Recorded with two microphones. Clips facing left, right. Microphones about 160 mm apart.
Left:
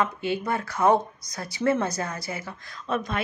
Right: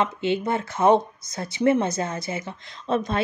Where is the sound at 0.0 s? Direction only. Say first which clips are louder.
Right 3 dB; 25° right (ahead or behind).